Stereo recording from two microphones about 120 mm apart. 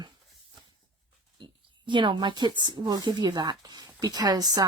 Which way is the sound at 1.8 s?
40° right (ahead or behind).